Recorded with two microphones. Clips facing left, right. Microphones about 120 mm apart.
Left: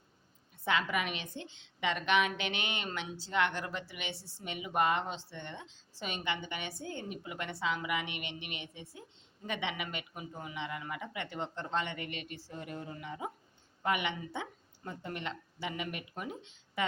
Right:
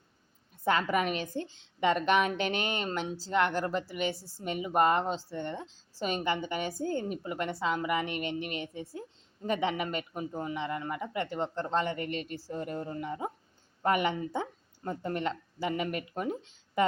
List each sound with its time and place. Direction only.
0.6 s a woman's voice: 45° right (ahead or behind)